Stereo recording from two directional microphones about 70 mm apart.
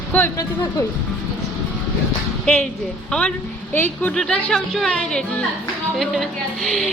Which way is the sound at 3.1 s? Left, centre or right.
Centre.